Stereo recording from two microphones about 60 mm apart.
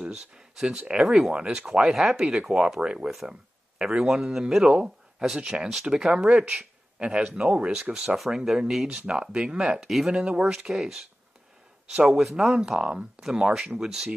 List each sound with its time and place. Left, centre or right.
0.0 s speech: centre
3.1 s a sound: centre
4.0 s a man's voice: centre
4.6 s speech: centre
9.8 s a man's voice: centre
10.7 s speech: centre
12.1 s speech: centre